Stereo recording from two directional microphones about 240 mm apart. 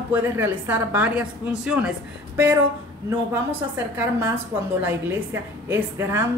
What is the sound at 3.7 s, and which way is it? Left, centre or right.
Speech, centre.